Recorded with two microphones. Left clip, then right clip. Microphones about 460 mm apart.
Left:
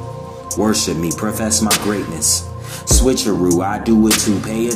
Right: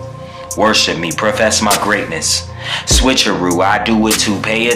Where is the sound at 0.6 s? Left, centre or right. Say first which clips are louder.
Right 6 dB; left.